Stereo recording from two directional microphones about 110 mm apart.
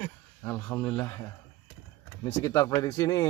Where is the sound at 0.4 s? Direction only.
10° left (ahead or behind).